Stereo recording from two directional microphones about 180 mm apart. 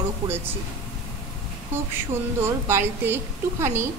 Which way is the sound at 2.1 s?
15° right (ahead or behind).